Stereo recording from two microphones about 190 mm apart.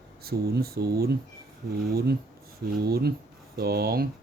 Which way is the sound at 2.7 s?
55° right (ahead or behind).